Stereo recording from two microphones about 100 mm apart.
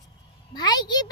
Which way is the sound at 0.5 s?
45° left (ahead or behind).